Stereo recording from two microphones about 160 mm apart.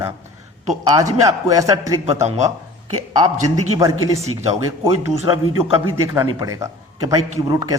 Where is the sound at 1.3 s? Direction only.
20° right (ahead or behind).